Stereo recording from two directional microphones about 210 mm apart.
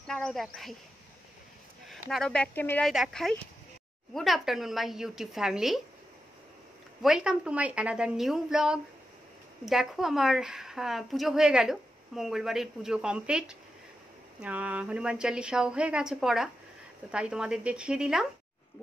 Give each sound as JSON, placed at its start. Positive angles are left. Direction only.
{"t": 0.0, "sound": "speech", "side_deg": 5}
{"t": 1.9, "sound": "a woman's voice", "side_deg": 0}
{"t": 7.0, "sound": "a woman's voice", "side_deg": -5}